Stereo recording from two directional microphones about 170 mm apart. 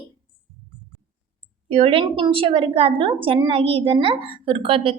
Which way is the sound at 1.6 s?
35° right (ahead or behind).